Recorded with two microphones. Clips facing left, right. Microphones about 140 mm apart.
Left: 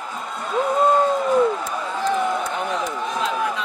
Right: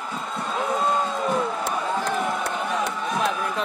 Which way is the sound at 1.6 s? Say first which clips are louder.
Left 1 dB; 70° right (ahead or behind).